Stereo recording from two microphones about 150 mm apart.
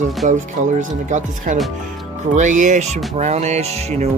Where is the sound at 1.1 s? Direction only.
55° right (ahead or behind).